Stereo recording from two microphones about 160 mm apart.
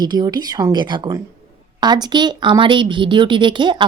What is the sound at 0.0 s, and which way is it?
A woman's voice, 25° right (ahead or behind).